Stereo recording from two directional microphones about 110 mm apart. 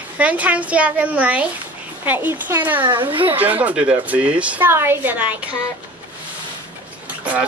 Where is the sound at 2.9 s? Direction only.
50° right (ahead or behind).